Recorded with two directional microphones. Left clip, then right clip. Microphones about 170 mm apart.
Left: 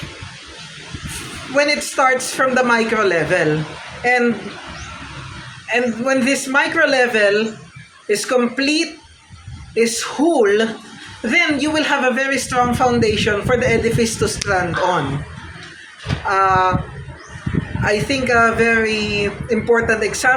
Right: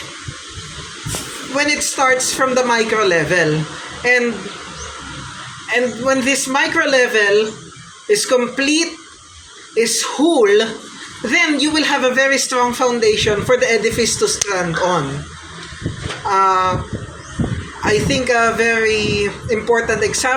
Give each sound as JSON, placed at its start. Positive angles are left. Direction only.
{"t": 1.5, "sound": "a man's voice", "side_deg": 15}
{"t": 5.7, "sound": "a man's voice", "side_deg": 20}
{"t": 16.3, "sound": "a man's voice", "side_deg": 20}
{"t": 17.8, "sound": "a man's voice", "side_deg": 20}